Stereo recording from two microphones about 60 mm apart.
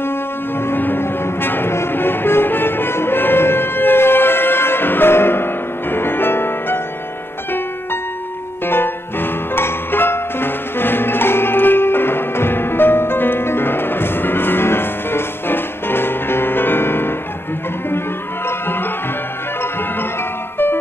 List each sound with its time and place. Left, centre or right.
0.6 s music: left
8.6 s music: left